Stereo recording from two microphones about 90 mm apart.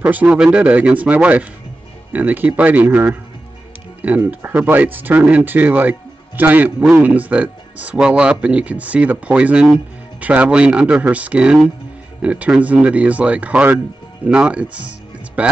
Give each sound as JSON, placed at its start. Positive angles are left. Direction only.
{"t": 0.0, "sound": "speech", "side_deg": -15}
{"t": 4.3, "sound": "speech", "side_deg": -20}